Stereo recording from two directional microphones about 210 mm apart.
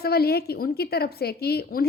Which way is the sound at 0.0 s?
50° left (ahead or behind).